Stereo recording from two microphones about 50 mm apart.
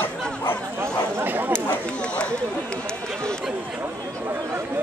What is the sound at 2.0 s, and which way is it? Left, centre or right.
Chatter, left.